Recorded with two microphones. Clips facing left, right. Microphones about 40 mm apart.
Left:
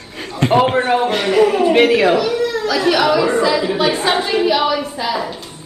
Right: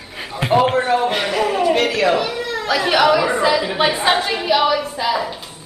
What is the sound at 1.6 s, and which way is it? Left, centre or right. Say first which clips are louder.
Speech: left 4 dB; centre.